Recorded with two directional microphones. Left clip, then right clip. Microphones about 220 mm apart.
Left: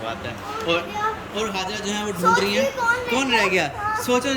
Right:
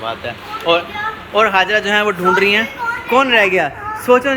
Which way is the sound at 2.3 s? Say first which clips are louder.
Right 4 dB; 5° left (ahead or behind).